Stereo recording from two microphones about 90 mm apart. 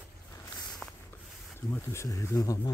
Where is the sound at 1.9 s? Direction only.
35° left (ahead or behind).